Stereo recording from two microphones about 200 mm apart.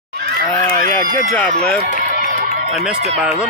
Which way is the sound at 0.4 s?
45° right (ahead or behind).